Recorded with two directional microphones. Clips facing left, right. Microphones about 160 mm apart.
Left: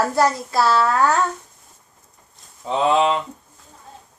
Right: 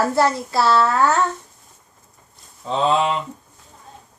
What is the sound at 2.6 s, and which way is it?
Speech, 15° left (ahead or behind).